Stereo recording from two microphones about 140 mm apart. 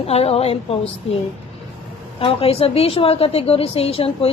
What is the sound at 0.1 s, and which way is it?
Speech, 45° left (ahead or behind).